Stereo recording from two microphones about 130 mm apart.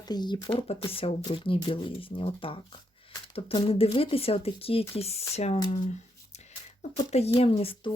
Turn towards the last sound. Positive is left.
turn(degrees=45)  # may be behind; listen again after turning